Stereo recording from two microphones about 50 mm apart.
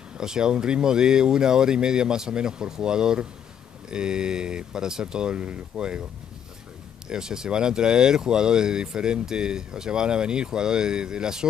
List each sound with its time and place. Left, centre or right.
0.2 s speech: centre
7.1 s speech: centre